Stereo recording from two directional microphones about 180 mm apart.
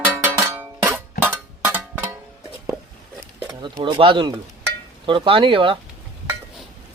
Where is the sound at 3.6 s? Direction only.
25° right (ahead or behind).